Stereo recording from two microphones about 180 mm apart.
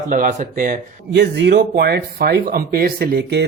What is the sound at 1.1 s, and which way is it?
Speech, 70° right (ahead or behind).